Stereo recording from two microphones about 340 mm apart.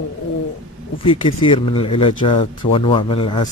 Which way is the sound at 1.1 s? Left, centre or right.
Centre.